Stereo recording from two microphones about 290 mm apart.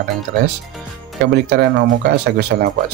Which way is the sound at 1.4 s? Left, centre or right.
Right.